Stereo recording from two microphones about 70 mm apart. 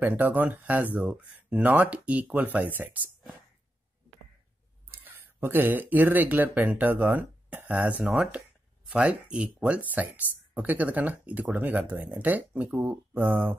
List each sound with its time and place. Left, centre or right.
0.0 s speech: right
4.9 s speech: right